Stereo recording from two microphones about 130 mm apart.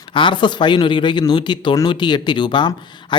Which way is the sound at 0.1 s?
40° left (ahead or behind).